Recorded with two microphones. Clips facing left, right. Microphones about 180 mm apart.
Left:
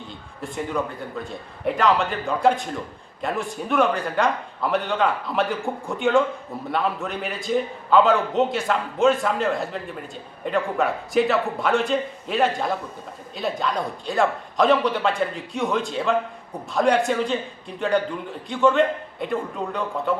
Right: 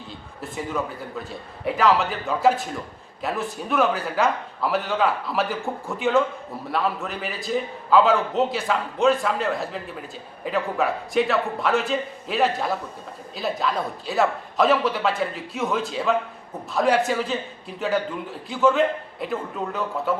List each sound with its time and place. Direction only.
0.5 s a man's voice: centre (ahead or behind)